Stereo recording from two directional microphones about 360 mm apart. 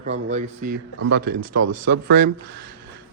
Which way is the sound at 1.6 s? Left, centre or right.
Right.